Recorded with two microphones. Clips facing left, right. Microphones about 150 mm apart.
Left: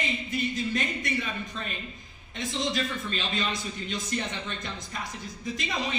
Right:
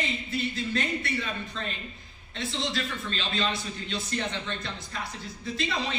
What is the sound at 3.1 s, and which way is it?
A man's voice, 15° left (ahead or behind).